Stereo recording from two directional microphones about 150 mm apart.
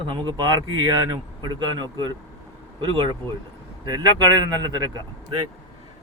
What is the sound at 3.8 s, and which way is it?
A man's voice, 25° right (ahead or behind).